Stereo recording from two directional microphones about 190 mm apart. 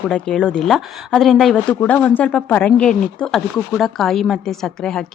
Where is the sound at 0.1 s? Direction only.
5° left (ahead or behind).